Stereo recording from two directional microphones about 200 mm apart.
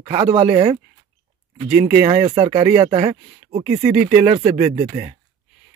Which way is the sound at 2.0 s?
25° right (ahead or behind).